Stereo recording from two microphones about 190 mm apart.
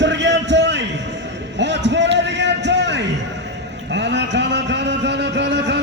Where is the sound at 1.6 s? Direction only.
65° right (ahead or behind).